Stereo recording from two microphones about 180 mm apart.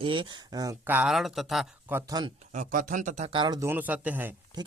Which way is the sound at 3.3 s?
25° right (ahead or behind).